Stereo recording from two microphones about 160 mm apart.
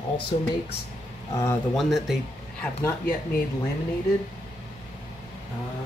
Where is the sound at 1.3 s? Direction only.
20° left (ahead or behind).